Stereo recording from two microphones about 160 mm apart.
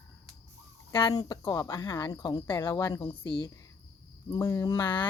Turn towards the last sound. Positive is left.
turn(degrees=25)  # may be behind; listen again after turning